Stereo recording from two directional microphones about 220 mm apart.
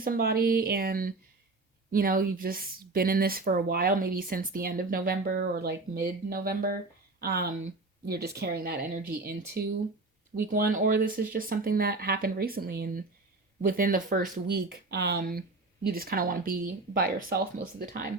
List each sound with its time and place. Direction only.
0.0 s speech: 40° right (ahead or behind)